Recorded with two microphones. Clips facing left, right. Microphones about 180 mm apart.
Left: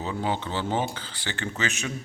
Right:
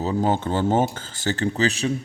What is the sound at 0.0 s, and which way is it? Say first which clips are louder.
A man's voice: right 7 dB; 40° right (ahead or behind).